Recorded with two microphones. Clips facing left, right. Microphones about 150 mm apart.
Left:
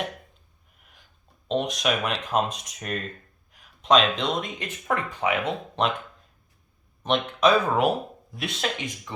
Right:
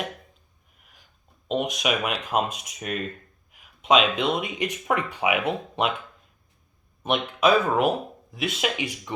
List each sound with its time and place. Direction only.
1.5 s speech: 5° right (ahead or behind)
7.0 s speech: 10° right (ahead or behind)